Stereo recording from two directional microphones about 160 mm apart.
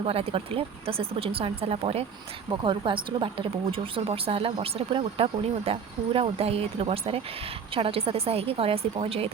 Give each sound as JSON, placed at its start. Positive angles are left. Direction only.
{"t": 0.0, "sound": "speech", "side_deg": -40}